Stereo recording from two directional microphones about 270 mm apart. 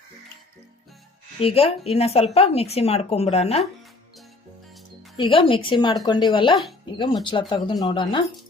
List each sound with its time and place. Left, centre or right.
1.4 s a woman's voice: left
5.1 s speech: centre